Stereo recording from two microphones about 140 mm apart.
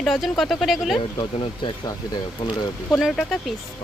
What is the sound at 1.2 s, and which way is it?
Speech, 30° left (ahead or behind).